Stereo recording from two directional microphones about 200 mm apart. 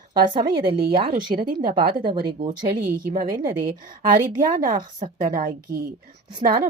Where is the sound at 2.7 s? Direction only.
40° right (ahead or behind).